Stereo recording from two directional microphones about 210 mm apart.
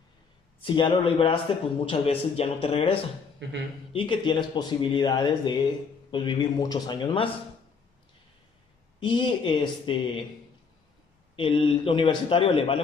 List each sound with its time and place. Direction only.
0.6 s speech: 25° left (ahead or behind)
3.4 s speech: 55° right (ahead or behind)
3.9 s speech: 25° left (ahead or behind)
9.0 s speech: 20° left (ahead or behind)
11.3 s speech: 25° left (ahead or behind)